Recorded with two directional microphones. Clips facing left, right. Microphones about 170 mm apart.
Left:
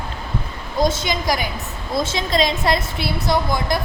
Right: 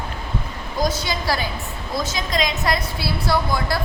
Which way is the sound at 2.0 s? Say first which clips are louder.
Left 4 dB; 25° left (ahead or behind).